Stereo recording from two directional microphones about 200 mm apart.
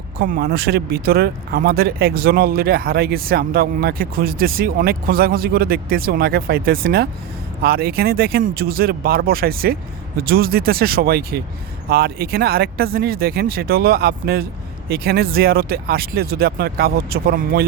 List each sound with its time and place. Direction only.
0.2 s speech: 50° right (ahead or behind)